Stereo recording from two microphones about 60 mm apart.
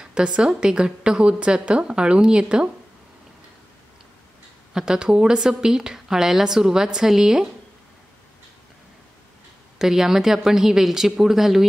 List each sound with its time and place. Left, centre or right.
0.0 s a woman's voice: centre
4.7 s a woman's voice: centre
9.8 s a woman's voice: centre